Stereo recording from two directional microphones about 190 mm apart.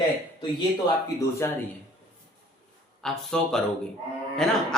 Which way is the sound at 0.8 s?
20° left (ahead or behind).